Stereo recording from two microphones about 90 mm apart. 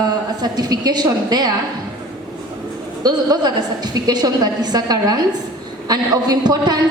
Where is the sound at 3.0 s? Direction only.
50° right (ahead or behind).